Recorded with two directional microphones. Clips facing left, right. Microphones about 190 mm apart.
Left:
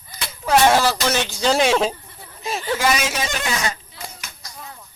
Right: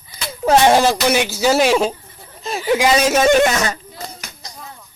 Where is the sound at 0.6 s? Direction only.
20° right (ahead or behind); by 2.0 s centre (ahead or behind).